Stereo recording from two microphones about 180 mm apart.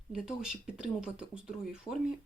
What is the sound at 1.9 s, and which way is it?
Speech, 25° left (ahead or behind).